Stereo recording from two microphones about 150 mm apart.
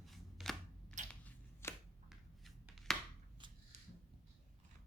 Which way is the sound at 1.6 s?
15° left (ahead or behind).